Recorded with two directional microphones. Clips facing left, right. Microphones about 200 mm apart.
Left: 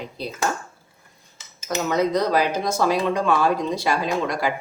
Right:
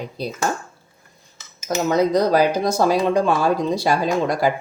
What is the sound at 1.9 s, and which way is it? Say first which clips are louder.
Speech: right 4 dB; 35° right (ahead or behind).